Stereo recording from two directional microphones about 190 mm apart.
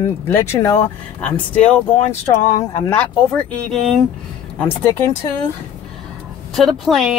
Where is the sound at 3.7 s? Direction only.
Centre (ahead or behind).